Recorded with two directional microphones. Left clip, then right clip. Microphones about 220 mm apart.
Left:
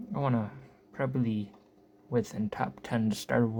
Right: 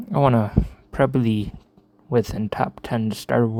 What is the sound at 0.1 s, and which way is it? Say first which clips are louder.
Speech: right 14 dB; 45° right (ahead or behind).